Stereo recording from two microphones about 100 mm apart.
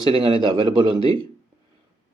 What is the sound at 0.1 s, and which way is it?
Speech, 60° right (ahead or behind).